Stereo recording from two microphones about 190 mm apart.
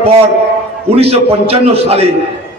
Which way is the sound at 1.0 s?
30° right (ahead or behind).